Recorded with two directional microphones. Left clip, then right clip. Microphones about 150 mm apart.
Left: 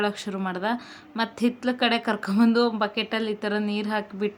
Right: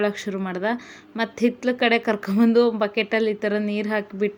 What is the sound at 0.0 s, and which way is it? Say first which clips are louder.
A woman's voice: right 3 dB; 15° right (ahead or behind).